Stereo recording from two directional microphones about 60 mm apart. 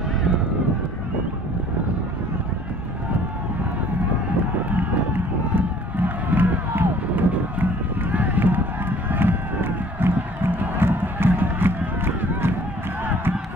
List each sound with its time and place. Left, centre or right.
4.6 s crowd: right